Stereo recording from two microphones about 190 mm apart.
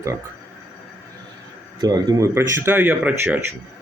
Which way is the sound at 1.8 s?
20° right (ahead or behind).